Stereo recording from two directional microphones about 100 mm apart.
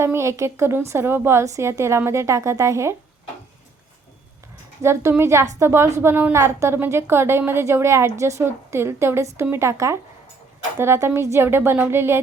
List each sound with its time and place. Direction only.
0.0 s a woman's voice: 25° right (ahead or behind)
4.8 s a woman's voice: 25° right (ahead or behind)